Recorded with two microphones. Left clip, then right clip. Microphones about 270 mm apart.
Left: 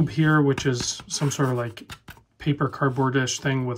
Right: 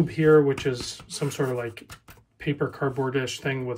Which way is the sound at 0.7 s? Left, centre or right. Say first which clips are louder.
Left 4 dB; left.